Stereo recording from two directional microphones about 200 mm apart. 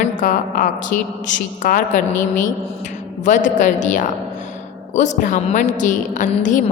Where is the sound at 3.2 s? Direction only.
40° left (ahead or behind).